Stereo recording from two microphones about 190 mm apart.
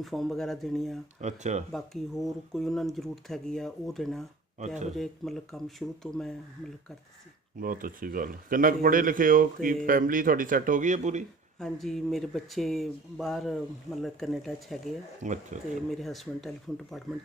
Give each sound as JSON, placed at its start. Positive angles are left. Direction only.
{"t": 0.0, "sound": "speech", "side_deg": 0}
{"t": 1.2, "sound": "speech", "side_deg": -40}
{"t": 1.7, "sound": "speech", "side_deg": 0}
{"t": 4.6, "sound": "speech", "side_deg": -40}
{"t": 4.9, "sound": "speech", "side_deg": 0}
{"t": 7.5, "sound": "speech", "side_deg": -45}
{"t": 11.6, "sound": "speech", "side_deg": 0}
{"t": 15.2, "sound": "speech", "side_deg": -40}
{"t": 15.9, "sound": "speech", "side_deg": 0}